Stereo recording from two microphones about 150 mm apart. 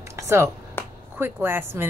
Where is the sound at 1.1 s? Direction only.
15° right (ahead or behind).